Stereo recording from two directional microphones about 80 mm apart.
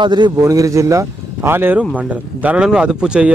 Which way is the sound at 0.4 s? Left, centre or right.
Right.